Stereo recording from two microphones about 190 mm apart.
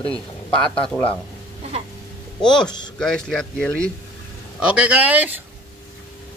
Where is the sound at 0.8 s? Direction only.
5° left (ahead or behind).